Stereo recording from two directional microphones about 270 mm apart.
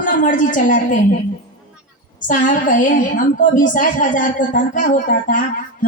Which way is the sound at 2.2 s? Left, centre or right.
Left.